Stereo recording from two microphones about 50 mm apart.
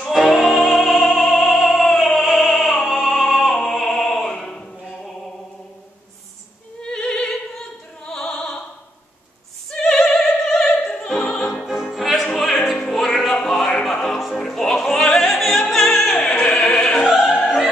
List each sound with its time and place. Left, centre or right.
0.0 s music: centre
3.6 s opera: centre
6.8 s opera: centre
9.7 s opera: centre
11.2 s music: centre
11.6 s opera: centre
12.4 s music: centre
14.4 s music: centre
16.3 s opera: centre
17.1 s opera: centre